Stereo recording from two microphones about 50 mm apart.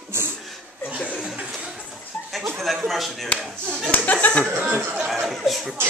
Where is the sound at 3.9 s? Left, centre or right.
Left.